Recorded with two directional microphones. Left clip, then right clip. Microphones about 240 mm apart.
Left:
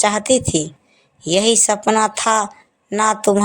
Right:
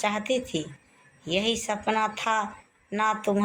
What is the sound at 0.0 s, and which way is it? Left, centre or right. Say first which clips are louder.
A woman's voice: left 11 dB; left.